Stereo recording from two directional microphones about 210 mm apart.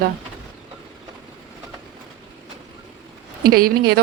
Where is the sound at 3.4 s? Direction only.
45° right (ahead or behind).